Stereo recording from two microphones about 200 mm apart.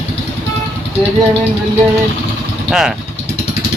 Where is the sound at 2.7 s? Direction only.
Centre (ahead or behind).